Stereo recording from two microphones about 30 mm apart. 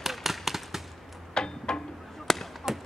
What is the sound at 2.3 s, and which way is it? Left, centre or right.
Honk, centre.